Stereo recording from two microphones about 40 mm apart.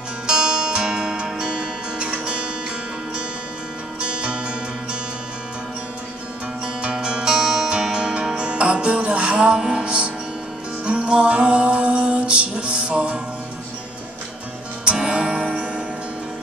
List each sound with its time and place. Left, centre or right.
0.3 s music: centre
4.0 s music: right
6.6 s music: right
9.6 s music: centre
9.8 s music: right
15.0 s music: right